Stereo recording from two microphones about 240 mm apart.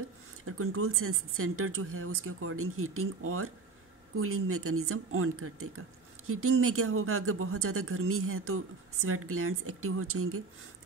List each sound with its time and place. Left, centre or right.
0.5 s speech: right